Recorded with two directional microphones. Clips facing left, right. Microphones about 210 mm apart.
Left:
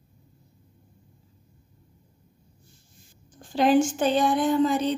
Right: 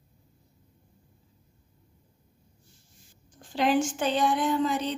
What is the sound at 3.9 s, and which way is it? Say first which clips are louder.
A woman's voice: left 4 dB; 45° left (ahead or behind).